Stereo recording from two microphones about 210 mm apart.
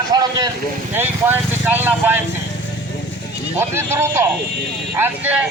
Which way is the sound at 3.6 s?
10° right (ahead or behind).